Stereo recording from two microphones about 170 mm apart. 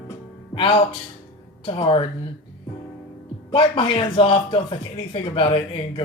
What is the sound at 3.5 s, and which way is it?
Speech, 30° left (ahead or behind).